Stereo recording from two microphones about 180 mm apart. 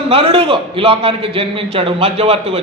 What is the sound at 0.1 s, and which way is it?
A man's voice, 30° right (ahead or behind).